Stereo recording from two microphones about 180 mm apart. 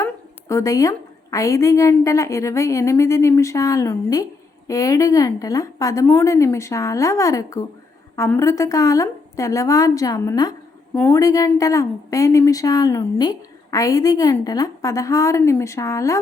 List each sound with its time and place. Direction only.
0.0 s a woman's voice: 20° left (ahead or behind)